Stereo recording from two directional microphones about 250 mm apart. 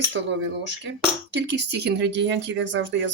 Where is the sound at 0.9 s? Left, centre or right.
Right.